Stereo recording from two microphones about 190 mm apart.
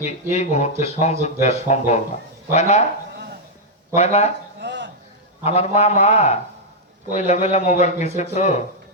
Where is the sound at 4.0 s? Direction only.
35° left (ahead or behind).